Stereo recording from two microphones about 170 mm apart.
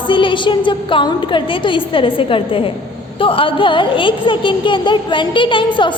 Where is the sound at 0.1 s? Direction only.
30° left (ahead or behind).